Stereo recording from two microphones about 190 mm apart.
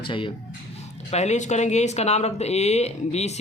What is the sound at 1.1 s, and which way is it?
Speech, 35° left (ahead or behind).